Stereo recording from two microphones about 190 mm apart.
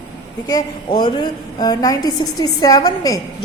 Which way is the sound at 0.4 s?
20° left (ahead or behind).